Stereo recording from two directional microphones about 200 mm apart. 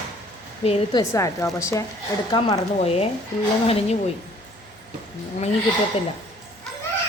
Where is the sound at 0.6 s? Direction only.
30° left (ahead or behind).